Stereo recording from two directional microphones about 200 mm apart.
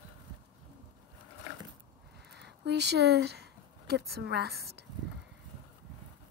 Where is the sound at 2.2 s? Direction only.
55° right (ahead or behind).